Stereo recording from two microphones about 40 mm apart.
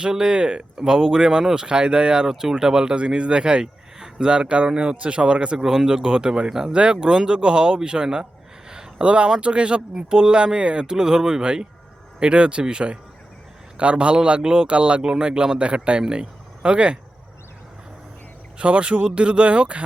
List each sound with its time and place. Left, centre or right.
0.0 s speech: centre
6.5 s speech: centre
6.7 s speech: right
18.6 s speech: right